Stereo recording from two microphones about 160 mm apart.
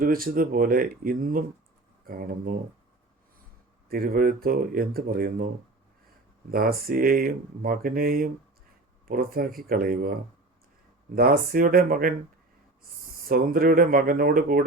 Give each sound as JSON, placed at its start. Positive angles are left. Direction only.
{"t": 0.0, "sound": "speech", "side_deg": -65}
{"t": 3.8, "sound": "speech", "side_deg": -65}
{"t": 6.5, "sound": "speech", "side_deg": -65}
{"t": 13.2, "sound": "speech", "side_deg": -65}